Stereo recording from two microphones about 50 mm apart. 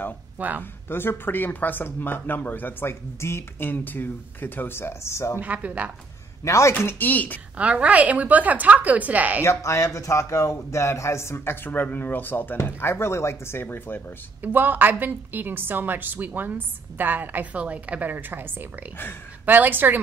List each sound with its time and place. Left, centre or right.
0.4 s a woman's voice: right
0.8 s speech: left
3.5 s speech: left
5.0 s a man's voice: left
5.4 s a woman's voice: right
6.4 s speech: left
7.0 s speech: left
7.5 s a woman's voice: right
9.4 s a man's voice: left
12.8 s speech: left
14.4 s a woman's voice: right